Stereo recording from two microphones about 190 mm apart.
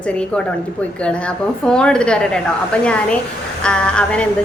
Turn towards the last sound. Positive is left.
turn(degrees=5)  # may be behind; listen again after turning